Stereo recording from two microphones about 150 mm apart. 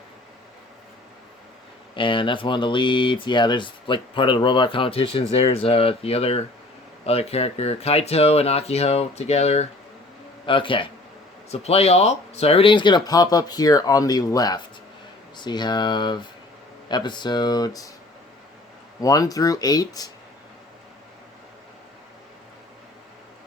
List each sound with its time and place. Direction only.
2.0 s speech: 35° left (ahead or behind)
10.4 s speech: 35° left (ahead or behind)
18.9 s speech: 25° left (ahead or behind)